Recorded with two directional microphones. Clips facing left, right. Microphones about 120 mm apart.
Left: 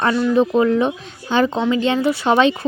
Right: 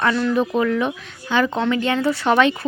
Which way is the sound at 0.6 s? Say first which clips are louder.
Left 4 dB; 30° left (ahead or behind).